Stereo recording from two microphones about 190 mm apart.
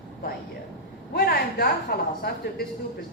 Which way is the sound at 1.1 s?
55° left (ahead or behind).